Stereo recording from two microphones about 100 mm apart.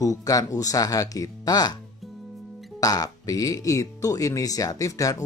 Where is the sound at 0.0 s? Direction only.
35° left (ahead or behind).